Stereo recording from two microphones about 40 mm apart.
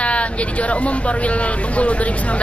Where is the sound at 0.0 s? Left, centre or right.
Left.